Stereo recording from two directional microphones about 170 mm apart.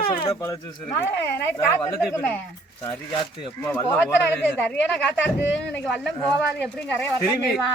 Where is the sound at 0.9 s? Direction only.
15° left (ahead or behind).